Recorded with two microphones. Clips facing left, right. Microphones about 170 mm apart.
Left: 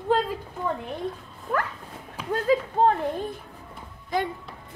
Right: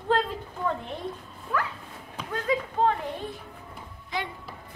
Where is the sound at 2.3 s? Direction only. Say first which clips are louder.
Left 5 dB; 40° left (ahead or behind).